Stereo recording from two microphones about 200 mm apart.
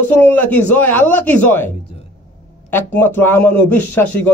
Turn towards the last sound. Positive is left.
turn(degrees=10)  # may be behind; listen again after turning